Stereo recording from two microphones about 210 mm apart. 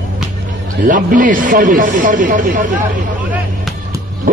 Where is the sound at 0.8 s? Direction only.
40° right (ahead or behind).